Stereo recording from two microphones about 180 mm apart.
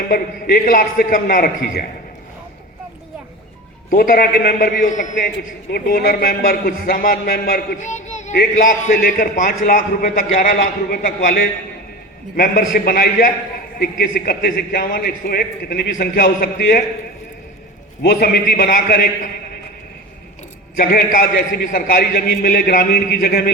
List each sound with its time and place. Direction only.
0.1 s a man's voice: 50° left (ahead or behind)
3.9 s a man's voice: 55° left (ahead or behind)
5.7 s a man's voice: 60° left (ahead or behind)
18.0 s a man's voice: 60° left (ahead or behind)
20.7 s a man's voice: 50° left (ahead or behind)